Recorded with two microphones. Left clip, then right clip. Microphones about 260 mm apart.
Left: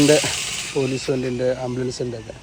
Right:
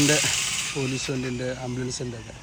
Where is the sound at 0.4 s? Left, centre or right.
Left.